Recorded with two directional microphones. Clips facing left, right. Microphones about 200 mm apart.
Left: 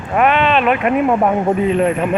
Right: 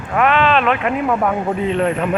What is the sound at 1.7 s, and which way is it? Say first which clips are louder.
Speech: left 2 dB; 5° left (ahead or behind).